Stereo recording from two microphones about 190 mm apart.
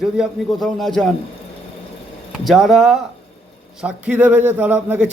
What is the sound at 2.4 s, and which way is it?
A man's voice, centre (ahead or behind).